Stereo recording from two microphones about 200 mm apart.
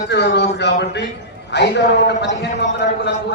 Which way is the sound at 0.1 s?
60° left (ahead or behind).